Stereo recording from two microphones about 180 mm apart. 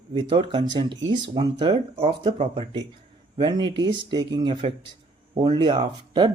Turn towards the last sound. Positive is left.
turn(degrees=-25)  # may be behind; listen again after turning